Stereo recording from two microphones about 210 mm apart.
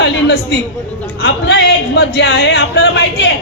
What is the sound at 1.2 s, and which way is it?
A man's voice, 50° left (ahead or behind).